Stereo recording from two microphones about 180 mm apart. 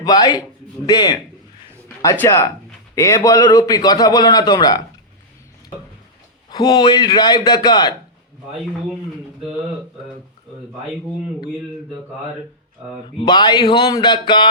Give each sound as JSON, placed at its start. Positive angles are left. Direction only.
{"t": 0.0, "sound": "a man's voice", "side_deg": 20}
{"t": 6.5, "sound": "a man's voice", "side_deg": 25}
{"t": 12.8, "sound": "speech", "side_deg": -5}
{"t": 13.1, "sound": "a man's voice", "side_deg": 25}